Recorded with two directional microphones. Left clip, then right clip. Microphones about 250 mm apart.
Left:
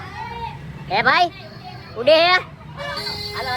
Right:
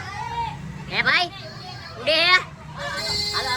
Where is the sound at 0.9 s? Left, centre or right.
Centre.